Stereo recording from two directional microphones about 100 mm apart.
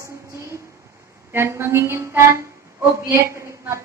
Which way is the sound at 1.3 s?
25° right (ahead or behind).